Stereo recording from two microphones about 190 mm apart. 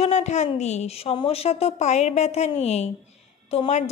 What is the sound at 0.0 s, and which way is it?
Speech, 35° left (ahead or behind).